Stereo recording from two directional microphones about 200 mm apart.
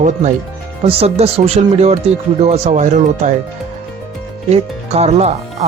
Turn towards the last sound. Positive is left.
turn(degrees=-30)  # may be behind; listen again after turning